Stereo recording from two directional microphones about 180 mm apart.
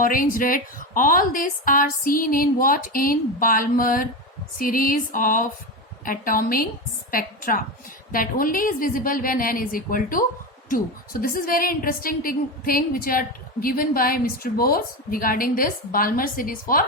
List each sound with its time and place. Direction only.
0.0 s a woman's voice: 50° left (ahead or behind)